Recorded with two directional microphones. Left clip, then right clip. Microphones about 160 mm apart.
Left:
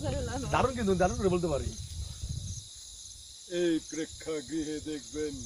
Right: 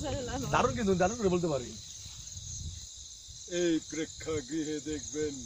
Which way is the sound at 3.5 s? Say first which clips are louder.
Left 1 dB; 20° right (ahead or behind).